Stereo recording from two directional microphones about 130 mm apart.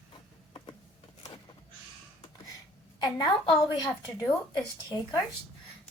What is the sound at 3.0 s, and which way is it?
Speech, 30° left (ahead or behind).